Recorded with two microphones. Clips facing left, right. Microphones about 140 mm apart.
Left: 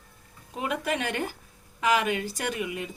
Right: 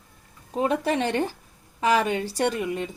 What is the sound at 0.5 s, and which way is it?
A woman's voice, 35° right (ahead or behind).